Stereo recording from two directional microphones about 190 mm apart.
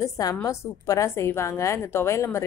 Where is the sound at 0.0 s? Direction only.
15° left (ahead or behind).